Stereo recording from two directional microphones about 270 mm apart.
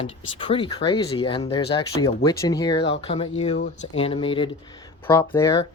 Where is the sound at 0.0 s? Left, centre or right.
Centre.